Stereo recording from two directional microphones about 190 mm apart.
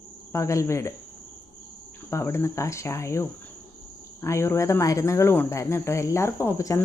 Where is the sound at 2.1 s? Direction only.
15° left (ahead or behind).